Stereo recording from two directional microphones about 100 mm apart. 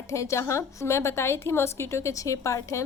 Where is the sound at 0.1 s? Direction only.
30° left (ahead or behind).